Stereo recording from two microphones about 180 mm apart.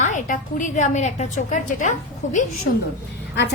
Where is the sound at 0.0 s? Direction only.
45° left (ahead or behind).